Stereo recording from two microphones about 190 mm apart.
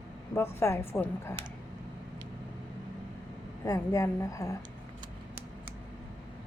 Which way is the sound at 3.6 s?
15° left (ahead or behind).